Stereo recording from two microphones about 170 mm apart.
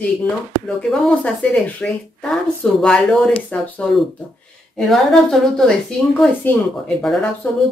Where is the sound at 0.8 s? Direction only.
Centre (ahead or behind).